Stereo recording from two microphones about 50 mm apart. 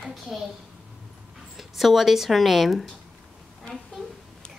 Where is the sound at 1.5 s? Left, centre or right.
Centre.